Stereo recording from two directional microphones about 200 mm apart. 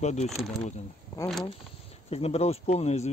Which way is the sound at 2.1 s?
30° left (ahead or behind).